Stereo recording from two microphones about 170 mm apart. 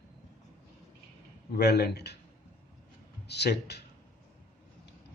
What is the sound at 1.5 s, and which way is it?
Speech, 70° left (ahead or behind).